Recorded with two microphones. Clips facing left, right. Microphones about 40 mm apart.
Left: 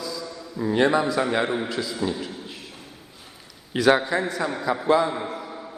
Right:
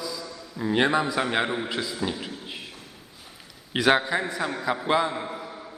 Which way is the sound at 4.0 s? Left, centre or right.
Centre.